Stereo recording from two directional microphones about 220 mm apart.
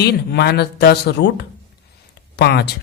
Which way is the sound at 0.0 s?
45° left (ahead or behind).